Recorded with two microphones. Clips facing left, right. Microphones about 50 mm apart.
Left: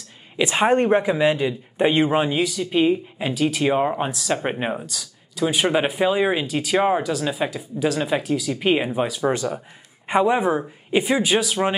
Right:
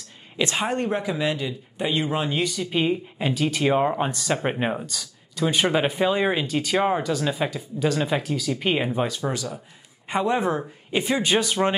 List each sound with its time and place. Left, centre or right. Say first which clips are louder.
0.6 s speech: left 11 dB; left
2.3 s speech: left 3 dB; centre
9.2 s speech: left 6 dB; left
10.0 s speech: left 4 dB; centre